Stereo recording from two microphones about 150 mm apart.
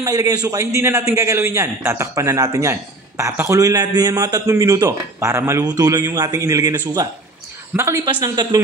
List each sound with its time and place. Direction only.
0.0 s a man's voice: 25° right (ahead or behind)